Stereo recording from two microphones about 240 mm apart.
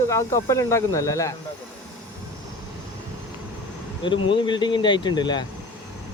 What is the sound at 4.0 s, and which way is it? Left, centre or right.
Speech, left.